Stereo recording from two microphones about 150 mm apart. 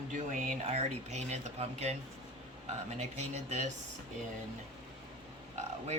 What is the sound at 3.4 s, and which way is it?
Speech, 50° right (ahead or behind).